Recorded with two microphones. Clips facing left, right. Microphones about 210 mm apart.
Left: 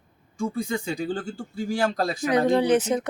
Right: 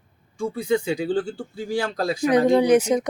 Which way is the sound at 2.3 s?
15° right (ahead or behind).